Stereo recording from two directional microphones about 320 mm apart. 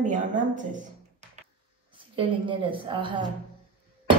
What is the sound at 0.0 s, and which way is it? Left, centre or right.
Speech, right.